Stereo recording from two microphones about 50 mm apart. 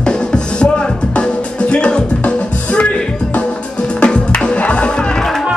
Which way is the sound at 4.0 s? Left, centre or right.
Left.